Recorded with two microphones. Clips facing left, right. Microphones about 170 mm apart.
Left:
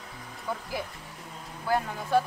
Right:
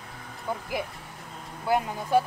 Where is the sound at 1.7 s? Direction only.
15° right (ahead or behind).